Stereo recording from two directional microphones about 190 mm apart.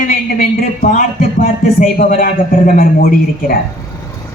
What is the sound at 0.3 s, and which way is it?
Speech, 45° left (ahead or behind).